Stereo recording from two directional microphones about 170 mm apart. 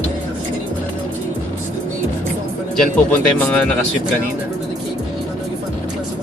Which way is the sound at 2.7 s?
10° left (ahead or behind).